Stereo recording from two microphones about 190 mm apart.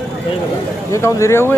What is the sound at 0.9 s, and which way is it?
Speech, 15° left (ahead or behind).